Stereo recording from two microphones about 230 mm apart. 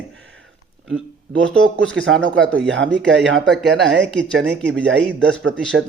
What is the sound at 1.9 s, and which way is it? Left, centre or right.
Speech, right.